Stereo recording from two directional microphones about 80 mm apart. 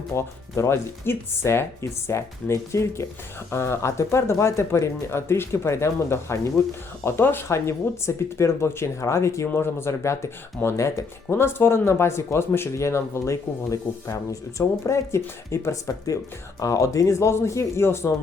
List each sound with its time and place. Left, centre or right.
0.1 s speech: left